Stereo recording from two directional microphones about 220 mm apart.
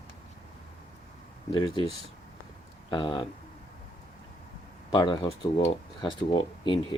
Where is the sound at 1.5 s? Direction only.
25° left (ahead or behind).